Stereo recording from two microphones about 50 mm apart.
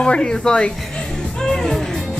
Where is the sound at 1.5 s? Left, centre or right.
Centre.